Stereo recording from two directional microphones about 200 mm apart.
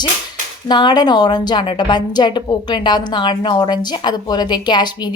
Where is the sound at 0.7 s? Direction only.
20° left (ahead or behind).